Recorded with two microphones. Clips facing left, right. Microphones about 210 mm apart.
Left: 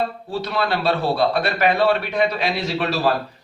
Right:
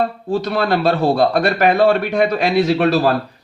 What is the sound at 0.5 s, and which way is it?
A man's voice, 45° right (ahead or behind).